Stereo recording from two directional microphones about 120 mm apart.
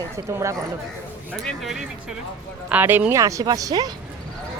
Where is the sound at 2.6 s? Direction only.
15° right (ahead or behind); by 3.9 s 30° right (ahead or behind).